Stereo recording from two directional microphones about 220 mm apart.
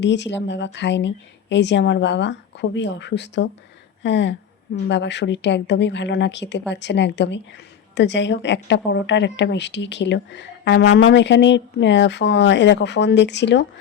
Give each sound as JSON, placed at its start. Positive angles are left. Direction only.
{"t": 0.0, "sound": "a woman's voice", "side_deg": 55}